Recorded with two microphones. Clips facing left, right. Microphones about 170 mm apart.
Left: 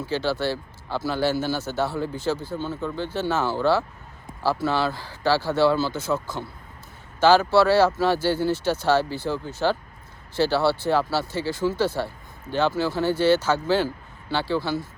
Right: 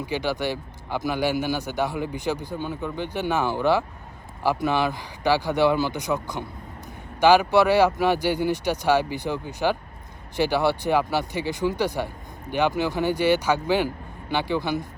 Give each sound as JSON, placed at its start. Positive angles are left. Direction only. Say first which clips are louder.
{"t": 0.0, "sound": "speech", "louder": "left 1 dB", "side_deg": -15}